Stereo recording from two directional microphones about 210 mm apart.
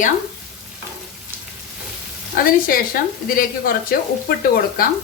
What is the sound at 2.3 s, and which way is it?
A woman's voice, 40° left (ahead or behind).